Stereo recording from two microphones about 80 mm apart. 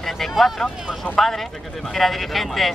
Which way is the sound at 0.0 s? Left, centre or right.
Centre.